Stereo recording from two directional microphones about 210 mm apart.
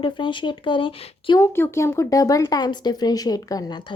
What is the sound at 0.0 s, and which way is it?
Speech, 25° left (ahead or behind).